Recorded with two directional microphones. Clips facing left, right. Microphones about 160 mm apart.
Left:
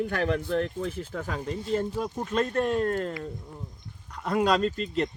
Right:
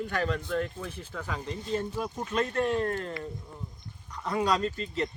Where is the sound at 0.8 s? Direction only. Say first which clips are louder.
Left 6 dB; 45° left (ahead or behind).